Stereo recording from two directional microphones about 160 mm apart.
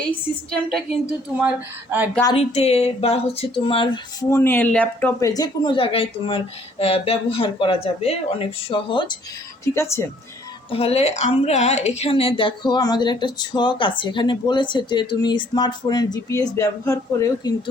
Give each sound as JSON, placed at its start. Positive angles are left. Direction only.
{"t": 0.5, "sound": "a woman's voice", "side_deg": 5}
{"t": 1.4, "sound": "speech", "side_deg": -10}
{"t": 2.3, "sound": "speech", "side_deg": 40}
{"t": 4.3, "sound": "speech", "side_deg": 15}
{"t": 5.3, "sound": "speech", "side_deg": 25}
{"t": 9.7, "sound": "speech", "side_deg": 15}
{"t": 10.7, "sound": "a woman's voice", "side_deg": 35}